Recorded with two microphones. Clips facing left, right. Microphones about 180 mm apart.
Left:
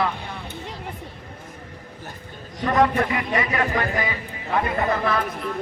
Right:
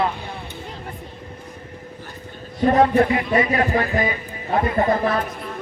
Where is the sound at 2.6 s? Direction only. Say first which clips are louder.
Right 4 dB; 35° right (ahead or behind).